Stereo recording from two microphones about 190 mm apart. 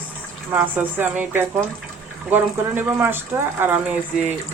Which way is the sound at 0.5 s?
10° right (ahead or behind).